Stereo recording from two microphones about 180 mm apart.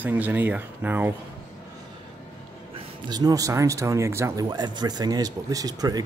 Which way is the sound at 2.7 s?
25° right (ahead or behind).